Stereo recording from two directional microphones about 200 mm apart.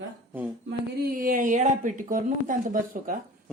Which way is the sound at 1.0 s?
45° right (ahead or behind).